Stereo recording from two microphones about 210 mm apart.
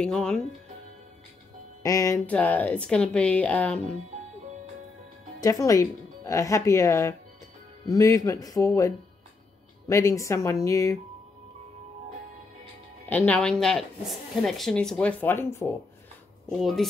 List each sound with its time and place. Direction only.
0.0 s speech: 5° left (ahead or behind)
1.8 s speech: 15° left (ahead or behind)
5.4 s speech: 15° left (ahead or behind)
13.1 s speech: 5° left (ahead or behind)
16.4 s speech: centre (ahead or behind)